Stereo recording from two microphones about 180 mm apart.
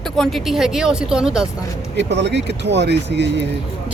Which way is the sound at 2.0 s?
70° right (ahead or behind).